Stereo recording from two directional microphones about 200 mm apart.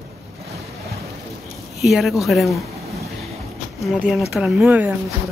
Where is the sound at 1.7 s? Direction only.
Centre (ahead or behind).